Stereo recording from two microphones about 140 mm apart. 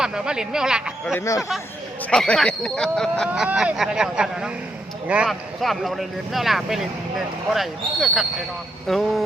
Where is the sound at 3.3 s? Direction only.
5° right (ahead or behind).